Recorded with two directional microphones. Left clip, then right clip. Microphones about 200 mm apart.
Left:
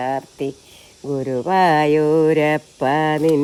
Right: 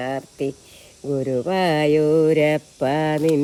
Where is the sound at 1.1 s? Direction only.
Centre (ahead or behind).